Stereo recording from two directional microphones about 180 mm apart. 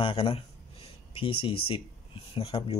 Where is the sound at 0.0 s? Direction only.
30° left (ahead or behind).